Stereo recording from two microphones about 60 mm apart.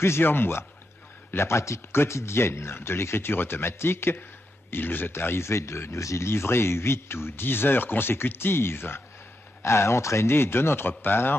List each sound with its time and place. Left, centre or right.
0.0 s speech: left
9.6 s speech: left